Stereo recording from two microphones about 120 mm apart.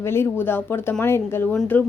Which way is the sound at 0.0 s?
20° left (ahead or behind).